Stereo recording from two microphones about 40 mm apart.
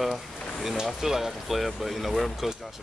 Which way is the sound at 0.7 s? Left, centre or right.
Centre.